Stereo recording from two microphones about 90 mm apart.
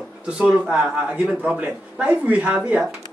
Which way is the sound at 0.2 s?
10° right (ahead or behind).